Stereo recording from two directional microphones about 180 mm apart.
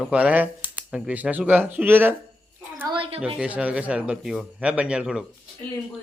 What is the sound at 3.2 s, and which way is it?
Speech, 5° right (ahead or behind).